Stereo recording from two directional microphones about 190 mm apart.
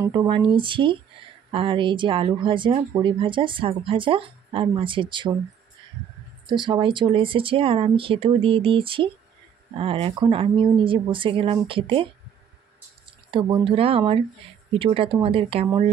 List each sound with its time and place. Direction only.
0.0 s speech: 20° right (ahead or behind)
6.5 s speech: 25° right (ahead or behind)
13.3 s speech: 25° right (ahead or behind)